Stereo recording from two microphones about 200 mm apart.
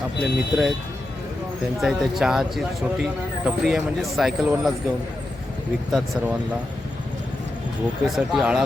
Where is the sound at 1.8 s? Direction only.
Centre (ahead or behind).